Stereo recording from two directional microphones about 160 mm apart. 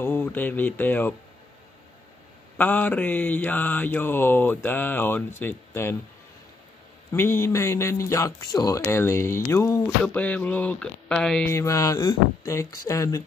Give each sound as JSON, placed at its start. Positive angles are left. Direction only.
{"t": 0.0, "sound": "mantra", "side_deg": 10}
{"t": 2.5, "sound": "mantra", "side_deg": 10}
{"t": 7.1, "sound": "mantra", "side_deg": 15}
{"t": 11.5, "sound": "speech", "side_deg": 20}